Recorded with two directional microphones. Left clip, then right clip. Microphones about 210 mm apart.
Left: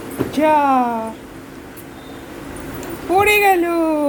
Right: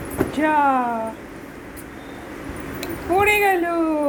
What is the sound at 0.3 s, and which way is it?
Speech, 25° left (ahead or behind).